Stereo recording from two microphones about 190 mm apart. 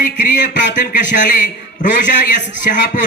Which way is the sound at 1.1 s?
45° left (ahead or behind).